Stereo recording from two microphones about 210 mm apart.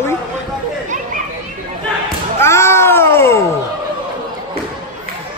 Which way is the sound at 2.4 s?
10° left (ahead or behind).